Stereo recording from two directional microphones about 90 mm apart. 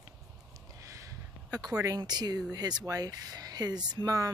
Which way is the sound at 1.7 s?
40° right (ahead or behind).